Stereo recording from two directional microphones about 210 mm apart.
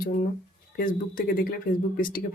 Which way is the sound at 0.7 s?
40° left (ahead or behind).